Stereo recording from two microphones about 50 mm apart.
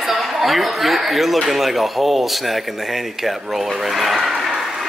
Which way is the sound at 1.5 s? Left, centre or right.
Centre.